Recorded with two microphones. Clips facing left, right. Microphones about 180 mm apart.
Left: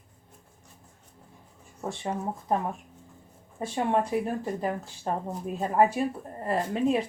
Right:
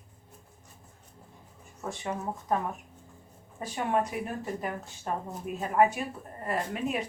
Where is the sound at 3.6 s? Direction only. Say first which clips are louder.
Left 3 dB; 30° left (ahead or behind).